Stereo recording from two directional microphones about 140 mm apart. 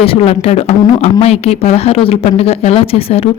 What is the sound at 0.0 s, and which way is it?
Speech, 45° left (ahead or behind).